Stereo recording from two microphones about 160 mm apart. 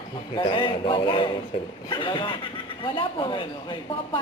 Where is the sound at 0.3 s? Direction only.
30° left (ahead or behind).